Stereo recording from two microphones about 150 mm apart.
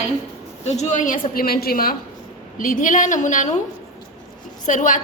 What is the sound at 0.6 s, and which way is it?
A woman's voice, 50° left (ahead or behind).